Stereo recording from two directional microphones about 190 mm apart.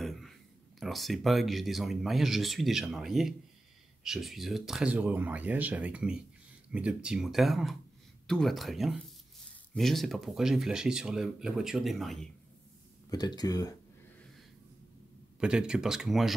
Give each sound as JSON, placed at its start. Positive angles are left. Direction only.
{"t": 0.0, "sound": "speech", "side_deg": 0}
{"t": 13.1, "sound": "speech", "side_deg": 20}
{"t": 15.4, "sound": "speech", "side_deg": -5}